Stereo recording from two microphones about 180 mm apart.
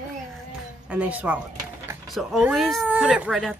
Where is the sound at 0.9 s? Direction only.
10° right (ahead or behind).